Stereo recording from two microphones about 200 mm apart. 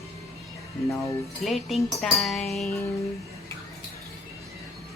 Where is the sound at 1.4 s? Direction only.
Centre (ahead or behind).